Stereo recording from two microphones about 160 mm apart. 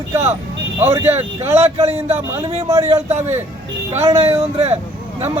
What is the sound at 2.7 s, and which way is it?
Speech, 20° right (ahead or behind).